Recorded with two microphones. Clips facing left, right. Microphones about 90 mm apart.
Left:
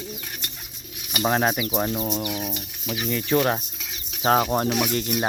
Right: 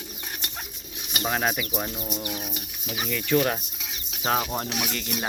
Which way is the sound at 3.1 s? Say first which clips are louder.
Left 2 dB; 30° left (ahead or behind).